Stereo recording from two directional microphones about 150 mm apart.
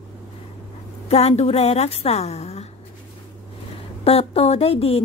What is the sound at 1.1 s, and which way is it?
A woman's voice, 45° left (ahead or behind).